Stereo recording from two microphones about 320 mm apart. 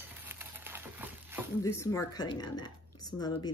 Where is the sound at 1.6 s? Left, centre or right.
Centre.